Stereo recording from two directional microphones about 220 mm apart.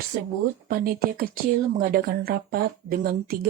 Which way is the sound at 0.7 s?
40° right (ahead or behind).